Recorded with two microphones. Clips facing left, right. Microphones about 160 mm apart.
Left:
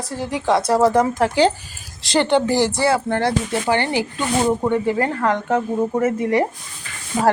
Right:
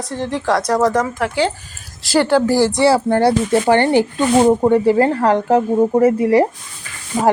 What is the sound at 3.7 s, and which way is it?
Speech, 50° right (ahead or behind).